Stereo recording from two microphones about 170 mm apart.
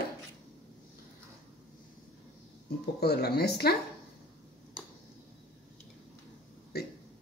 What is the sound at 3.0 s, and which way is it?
Speech, 70° left (ahead or behind).